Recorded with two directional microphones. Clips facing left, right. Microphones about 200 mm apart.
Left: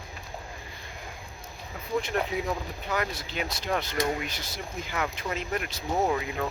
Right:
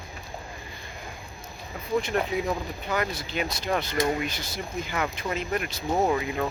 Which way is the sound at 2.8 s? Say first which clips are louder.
Right 2 dB; centre (ahead or behind).